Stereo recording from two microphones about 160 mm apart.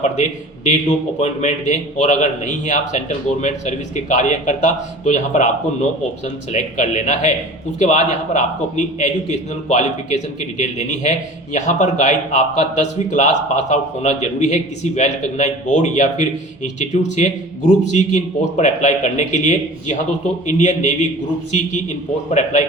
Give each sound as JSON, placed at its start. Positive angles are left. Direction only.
{"t": 0.0, "sound": "speech", "side_deg": 45}
{"t": 22.3, "sound": "speech", "side_deg": 45}